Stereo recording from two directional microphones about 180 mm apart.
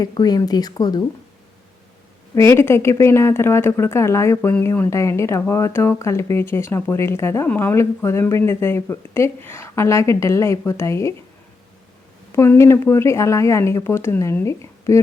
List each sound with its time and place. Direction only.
0.0 s speech: 20° left (ahead or behind)
2.3 s speech: 15° left (ahead or behind)
12.4 s speech: 15° left (ahead or behind)